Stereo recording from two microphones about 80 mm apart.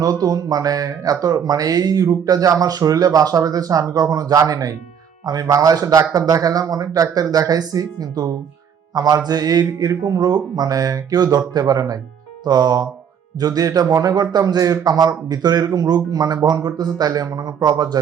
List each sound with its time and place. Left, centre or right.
0.0 s speech: right